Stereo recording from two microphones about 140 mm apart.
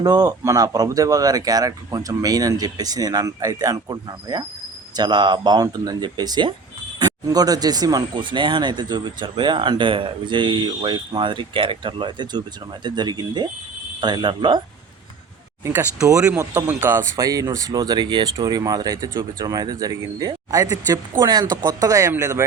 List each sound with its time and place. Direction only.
0.0 s speech: 25° right (ahead or behind)
15.6 s speech: 20° right (ahead or behind)